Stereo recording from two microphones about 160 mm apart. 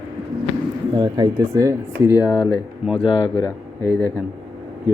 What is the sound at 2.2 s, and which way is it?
Speech, 25° left (ahead or behind).